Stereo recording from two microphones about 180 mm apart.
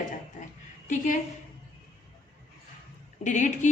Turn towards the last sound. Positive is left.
turn(degrees=45)  # may be behind; listen again after turning